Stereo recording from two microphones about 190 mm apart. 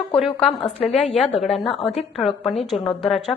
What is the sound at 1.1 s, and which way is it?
Speech, 30° left (ahead or behind).